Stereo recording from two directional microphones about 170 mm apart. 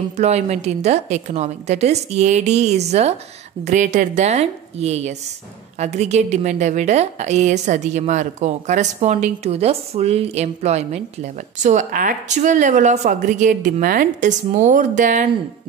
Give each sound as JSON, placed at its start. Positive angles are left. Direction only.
{"t": 0.1, "sound": "a woman's voice", "side_deg": -40}